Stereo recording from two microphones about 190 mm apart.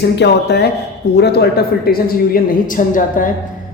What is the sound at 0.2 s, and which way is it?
A man's voice, 60° left (ahead or behind).